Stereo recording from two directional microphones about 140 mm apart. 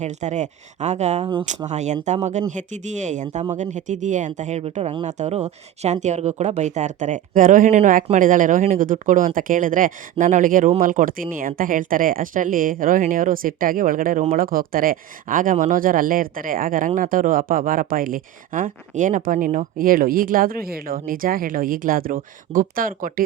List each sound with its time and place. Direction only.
0.0 s speech: 55° right (ahead or behind); by 23.2 s 80° right